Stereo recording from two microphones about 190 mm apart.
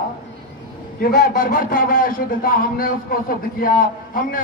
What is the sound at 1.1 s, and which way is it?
A man's voice, 50° left (ahead or behind).